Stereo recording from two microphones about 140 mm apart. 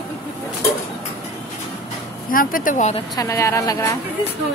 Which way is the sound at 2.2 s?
85° left.